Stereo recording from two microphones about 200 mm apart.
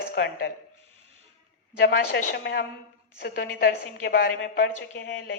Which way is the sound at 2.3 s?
55° left (ahead or behind).